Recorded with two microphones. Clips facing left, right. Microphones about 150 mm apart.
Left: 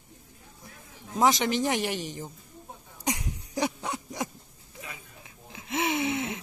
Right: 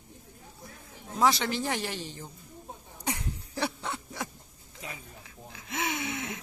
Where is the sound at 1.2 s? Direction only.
20° left (ahead or behind).